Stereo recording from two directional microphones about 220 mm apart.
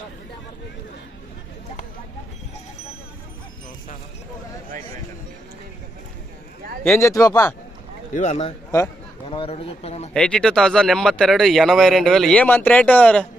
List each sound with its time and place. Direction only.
6.8 s speech: 5° left (ahead or behind)
7.1 s speech: 15° left (ahead or behind)
8.1 s a man's voice: 35° left (ahead or behind)
10.2 s speech: 5° left (ahead or behind)